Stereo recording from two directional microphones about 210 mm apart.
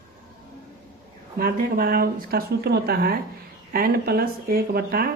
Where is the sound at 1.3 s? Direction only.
45° right (ahead or behind).